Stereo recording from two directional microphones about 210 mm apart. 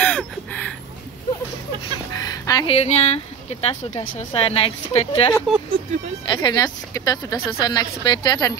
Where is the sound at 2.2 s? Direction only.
20° left (ahead or behind).